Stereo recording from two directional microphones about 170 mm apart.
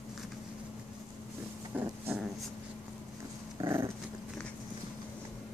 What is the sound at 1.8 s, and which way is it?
Dog, 10° right (ahead or behind).